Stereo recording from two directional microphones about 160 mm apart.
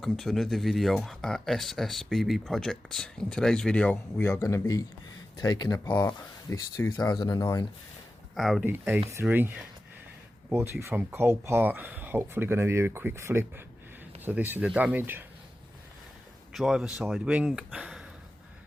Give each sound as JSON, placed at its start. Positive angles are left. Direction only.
{"t": 0.0, "sound": "speech", "side_deg": 0}
{"t": 4.3, "sound": "speech", "side_deg": 20}
{"t": 5.9, "sound": "speech", "side_deg": 10}
{"t": 8.4, "sound": "speech", "side_deg": 0}
{"t": 8.6, "sound": "speech", "side_deg": -10}
{"t": 16.5, "sound": "speech", "side_deg": 0}